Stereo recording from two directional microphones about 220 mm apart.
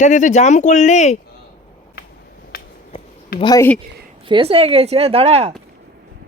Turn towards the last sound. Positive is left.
turn(degrees=-30)  # may be behind; listen again after turning